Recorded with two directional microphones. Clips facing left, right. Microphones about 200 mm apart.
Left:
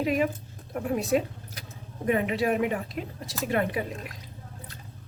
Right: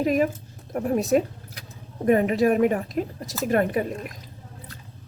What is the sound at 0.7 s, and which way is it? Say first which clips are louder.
Speech: right 4 dB; 45° right (ahead or behind).